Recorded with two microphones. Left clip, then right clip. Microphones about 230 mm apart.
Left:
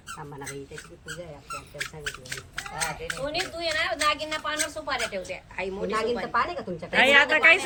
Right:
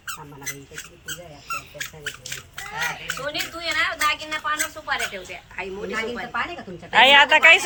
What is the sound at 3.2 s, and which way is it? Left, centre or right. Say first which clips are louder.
A woman's voice: right 1 dB; centre.